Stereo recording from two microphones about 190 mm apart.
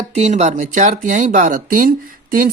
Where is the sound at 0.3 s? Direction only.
40° right (ahead or behind).